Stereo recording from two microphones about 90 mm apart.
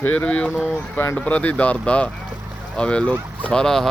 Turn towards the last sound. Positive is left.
turn(degrees=5)  # may be behind; listen again after turning